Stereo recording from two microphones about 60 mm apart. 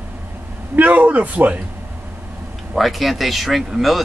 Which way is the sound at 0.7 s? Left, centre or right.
Right.